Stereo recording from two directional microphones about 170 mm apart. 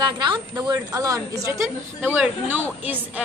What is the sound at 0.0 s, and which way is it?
A woman's voice, 25° right (ahead or behind).